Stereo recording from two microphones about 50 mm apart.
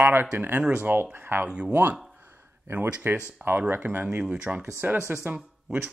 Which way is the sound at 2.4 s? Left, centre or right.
Right.